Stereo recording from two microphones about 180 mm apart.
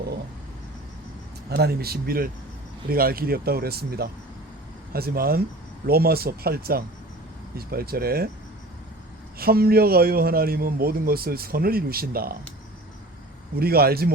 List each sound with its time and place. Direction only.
1.5 s a man's voice: 60° right (ahead or behind)
9.4 s a man's voice: 55° right (ahead or behind)
13.6 s a man's voice: 60° right (ahead or behind)